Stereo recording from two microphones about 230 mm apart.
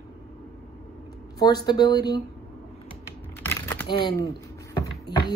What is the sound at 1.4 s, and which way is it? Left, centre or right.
Speech, centre.